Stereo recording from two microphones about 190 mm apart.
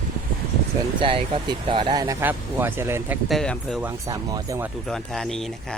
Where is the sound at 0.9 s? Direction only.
25° right (ahead or behind).